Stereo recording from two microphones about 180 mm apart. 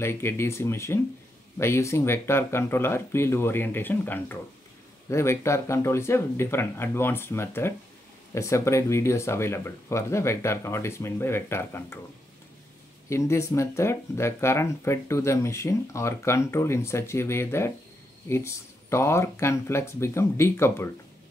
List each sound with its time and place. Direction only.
0.0 s speech: 15° left (ahead or behind)
13.1 s speech: 15° left (ahead or behind)